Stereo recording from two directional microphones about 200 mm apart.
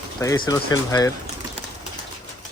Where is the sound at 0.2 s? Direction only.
20° left (ahead or behind).